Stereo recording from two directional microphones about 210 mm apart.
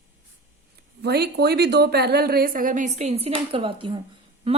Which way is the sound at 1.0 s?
50° right (ahead or behind).